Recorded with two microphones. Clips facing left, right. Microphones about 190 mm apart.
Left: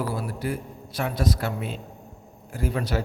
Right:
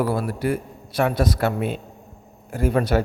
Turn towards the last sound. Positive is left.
turn(degrees=-55)  # may be behind; listen again after turning